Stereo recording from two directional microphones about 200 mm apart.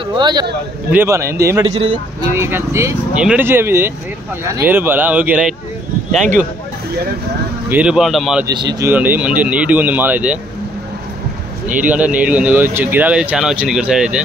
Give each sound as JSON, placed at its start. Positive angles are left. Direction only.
{"t": 0.2, "sound": "speech", "side_deg": -20}
{"t": 7.7, "sound": "speech", "side_deg": -5}
{"t": 8.5, "sound": "speech", "side_deg": -20}
{"t": 11.7, "sound": "speech", "side_deg": -5}